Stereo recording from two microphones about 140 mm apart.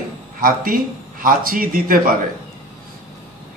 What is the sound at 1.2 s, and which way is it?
Speech, 90° right.